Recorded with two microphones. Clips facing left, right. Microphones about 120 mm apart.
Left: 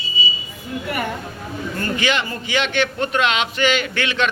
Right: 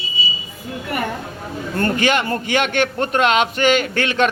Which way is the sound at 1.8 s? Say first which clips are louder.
Right 4 dB; 50° right (ahead or behind).